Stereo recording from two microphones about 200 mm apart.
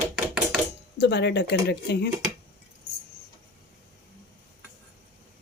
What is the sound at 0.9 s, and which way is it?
Speech, 60° left (ahead or behind).